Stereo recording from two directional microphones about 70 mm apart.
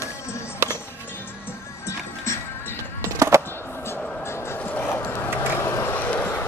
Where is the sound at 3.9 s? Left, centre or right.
Left.